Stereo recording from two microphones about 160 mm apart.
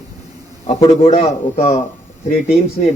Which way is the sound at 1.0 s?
45° left (ahead or behind).